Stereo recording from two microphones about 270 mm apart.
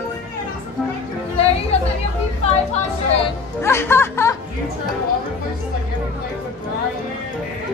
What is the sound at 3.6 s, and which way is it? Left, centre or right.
Speech, centre.